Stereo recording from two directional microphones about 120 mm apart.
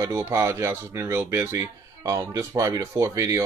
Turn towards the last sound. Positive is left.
turn(degrees=-25)  # may be behind; listen again after turning